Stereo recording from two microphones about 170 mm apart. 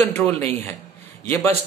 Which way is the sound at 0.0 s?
10° left (ahead or behind).